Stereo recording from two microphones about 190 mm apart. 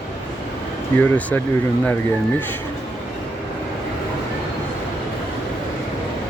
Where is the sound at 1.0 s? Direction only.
10° left (ahead or behind).